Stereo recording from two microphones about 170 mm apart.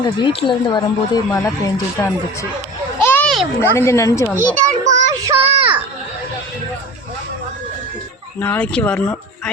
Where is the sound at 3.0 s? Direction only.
10° left (ahead or behind).